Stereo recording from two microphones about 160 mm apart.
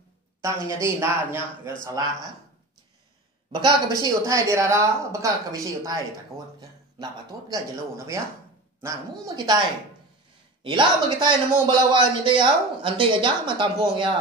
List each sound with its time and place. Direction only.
0.4 s speech: 20° right (ahead or behind)
4.0 s speech: 20° right (ahead or behind)
7.0 s speech: 20° right (ahead or behind)
10.6 s a man's voice: 30° right (ahead or behind)